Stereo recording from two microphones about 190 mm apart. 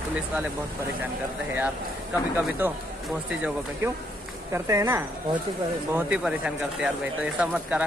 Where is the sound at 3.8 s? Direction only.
10° right (ahead or behind).